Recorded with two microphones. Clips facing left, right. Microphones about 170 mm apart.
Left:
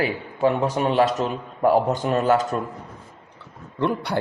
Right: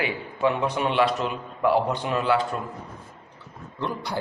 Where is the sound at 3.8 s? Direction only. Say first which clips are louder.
Left 6 dB; 60° left (ahead or behind).